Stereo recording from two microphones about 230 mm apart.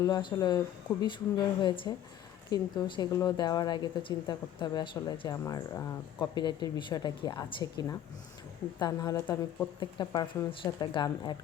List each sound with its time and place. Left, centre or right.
0.0 s a woman's voice: centre